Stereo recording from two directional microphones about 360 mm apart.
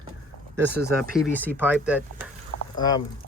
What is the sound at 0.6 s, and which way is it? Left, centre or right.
Speech, right.